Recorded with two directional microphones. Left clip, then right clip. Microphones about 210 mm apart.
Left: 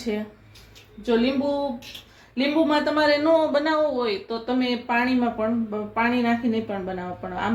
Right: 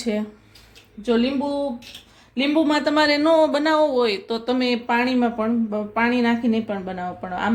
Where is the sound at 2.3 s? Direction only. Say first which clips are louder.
Right 1 dB; 50° right (ahead or behind).